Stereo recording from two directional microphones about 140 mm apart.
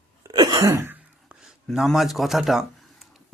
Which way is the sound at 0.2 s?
25° right (ahead or behind).